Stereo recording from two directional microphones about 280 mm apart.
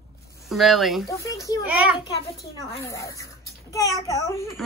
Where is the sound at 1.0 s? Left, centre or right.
Centre.